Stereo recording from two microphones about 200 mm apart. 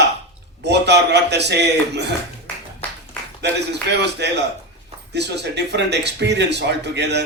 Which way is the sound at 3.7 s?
60° right (ahead or behind).